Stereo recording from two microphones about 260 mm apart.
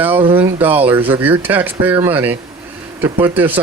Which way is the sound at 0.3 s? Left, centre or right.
Centre.